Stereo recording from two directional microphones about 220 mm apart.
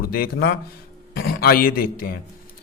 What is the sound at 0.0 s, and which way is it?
A man's voice, 40° left (ahead or behind).